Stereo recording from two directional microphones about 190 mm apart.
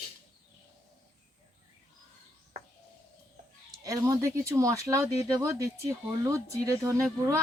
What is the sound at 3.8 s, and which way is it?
Speech, 15° right (ahead or behind).